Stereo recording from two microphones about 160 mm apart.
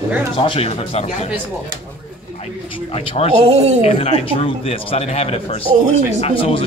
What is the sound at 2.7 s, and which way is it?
Speech, 35° left (ahead or behind).